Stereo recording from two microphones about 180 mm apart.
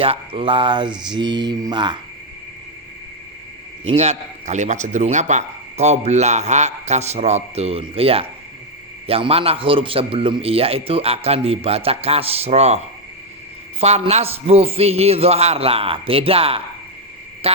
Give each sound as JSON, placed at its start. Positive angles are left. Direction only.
{"t": 0.0, "sound": "mantra", "side_deg": -30}
{"t": 3.9, "sound": "speech", "side_deg": -35}